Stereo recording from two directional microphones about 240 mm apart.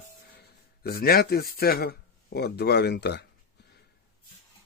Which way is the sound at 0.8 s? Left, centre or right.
Left.